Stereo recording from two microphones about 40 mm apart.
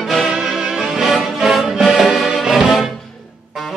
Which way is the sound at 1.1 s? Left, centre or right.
Centre.